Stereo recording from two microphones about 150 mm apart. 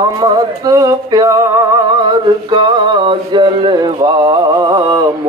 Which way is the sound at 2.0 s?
30° right (ahead or behind).